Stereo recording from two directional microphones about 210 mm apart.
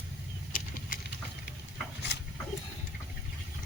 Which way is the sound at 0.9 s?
45° left (ahead or behind).